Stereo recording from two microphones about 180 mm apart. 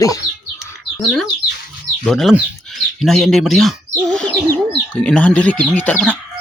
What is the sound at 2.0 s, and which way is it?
Speech, centre (ahead or behind).